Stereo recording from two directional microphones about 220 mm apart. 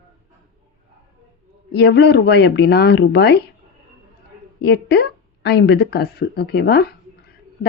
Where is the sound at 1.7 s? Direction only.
50° left (ahead or behind).